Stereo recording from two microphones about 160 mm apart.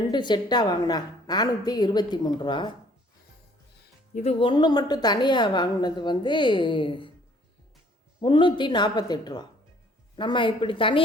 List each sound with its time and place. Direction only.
0.1 s a woman's voice: 25° left (ahead or behind)
4.1 s a woman's voice: 40° left (ahead or behind)
8.2 s a woman's voice: 30° left (ahead or behind)